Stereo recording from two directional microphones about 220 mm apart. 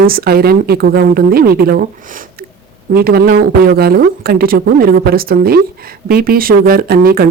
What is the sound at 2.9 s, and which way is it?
Speech, 45° right (ahead or behind).